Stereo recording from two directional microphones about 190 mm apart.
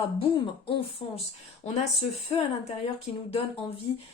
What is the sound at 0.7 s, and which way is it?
Speech, 30° left (ahead or behind).